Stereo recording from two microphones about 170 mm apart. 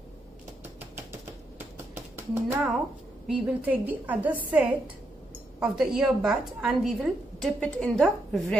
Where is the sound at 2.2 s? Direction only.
15° right (ahead or behind).